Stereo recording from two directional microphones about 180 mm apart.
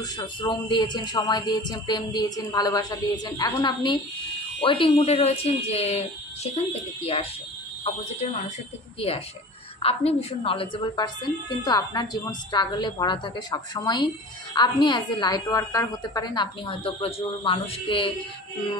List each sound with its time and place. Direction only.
0.0 s a woman's voice: 20° left (ahead or behind); by 8.5 s 40° left (ahead or behind)
9.8 s a woman's voice: 30° left (ahead or behind)